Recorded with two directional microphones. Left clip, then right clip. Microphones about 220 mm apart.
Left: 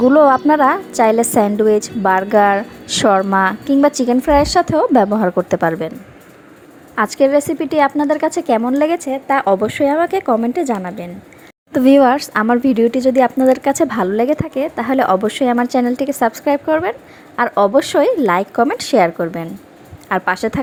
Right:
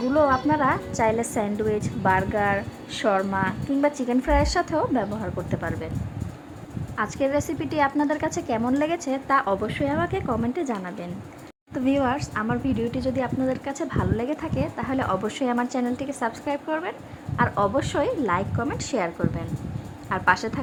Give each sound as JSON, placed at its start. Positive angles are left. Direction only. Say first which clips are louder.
{"t": 0.1, "sound": "a woman's voice", "louder": "left 6 dB", "side_deg": 30}
{"t": 6.9, "sound": "a woman's voice", "louder": "left 11 dB", "side_deg": 30}
{"t": 11.7, "sound": "a woman's voice", "louder": "left 13 dB", "side_deg": 35}